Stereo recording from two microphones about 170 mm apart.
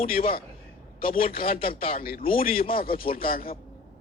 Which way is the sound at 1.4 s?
60° left (ahead or behind).